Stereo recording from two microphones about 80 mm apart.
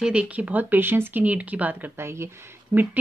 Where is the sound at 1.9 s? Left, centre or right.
Right.